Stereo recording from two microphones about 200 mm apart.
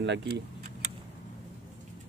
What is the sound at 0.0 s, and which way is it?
Speech, 60° right (ahead or behind).